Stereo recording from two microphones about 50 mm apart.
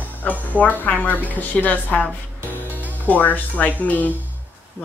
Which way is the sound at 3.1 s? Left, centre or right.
Left.